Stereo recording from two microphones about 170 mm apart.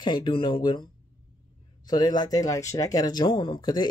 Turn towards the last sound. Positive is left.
turn(degrees=25)  # may be behind; listen again after turning